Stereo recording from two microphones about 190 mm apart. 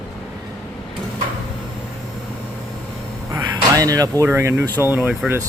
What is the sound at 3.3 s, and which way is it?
Speech, 20° right (ahead or behind).